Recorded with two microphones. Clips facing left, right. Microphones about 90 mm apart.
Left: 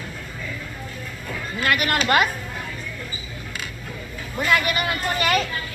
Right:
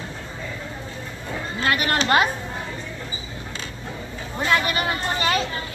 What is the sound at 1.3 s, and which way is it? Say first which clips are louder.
Speech: even; 30° right (ahead or behind).